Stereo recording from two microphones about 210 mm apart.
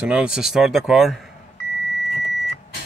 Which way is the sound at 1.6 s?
50° left (ahead or behind).